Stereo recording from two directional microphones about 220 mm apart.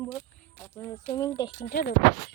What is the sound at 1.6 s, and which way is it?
Speech, 45° left (ahead or behind).